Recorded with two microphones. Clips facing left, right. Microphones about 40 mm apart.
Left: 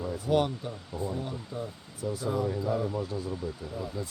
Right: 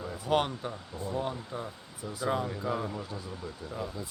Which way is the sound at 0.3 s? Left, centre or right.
Right.